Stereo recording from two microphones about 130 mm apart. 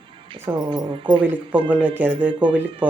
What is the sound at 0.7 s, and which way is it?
Speech, 40° right (ahead or behind).